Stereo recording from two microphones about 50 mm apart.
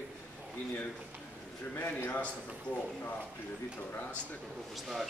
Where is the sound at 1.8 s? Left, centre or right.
Left.